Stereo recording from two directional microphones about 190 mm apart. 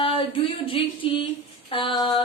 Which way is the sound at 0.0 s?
30° left (ahead or behind).